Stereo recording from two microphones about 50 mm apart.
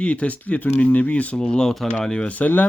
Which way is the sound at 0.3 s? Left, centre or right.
Left.